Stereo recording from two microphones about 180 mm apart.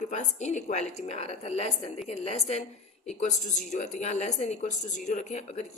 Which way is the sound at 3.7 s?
40° left (ahead or behind).